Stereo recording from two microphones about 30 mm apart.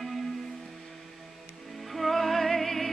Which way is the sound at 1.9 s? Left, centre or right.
Centre.